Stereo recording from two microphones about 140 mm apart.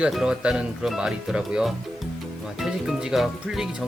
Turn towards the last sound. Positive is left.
turn(degrees=0)  # may be behind; listen again after turning